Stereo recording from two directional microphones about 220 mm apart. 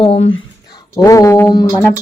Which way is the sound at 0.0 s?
25° left (ahead or behind).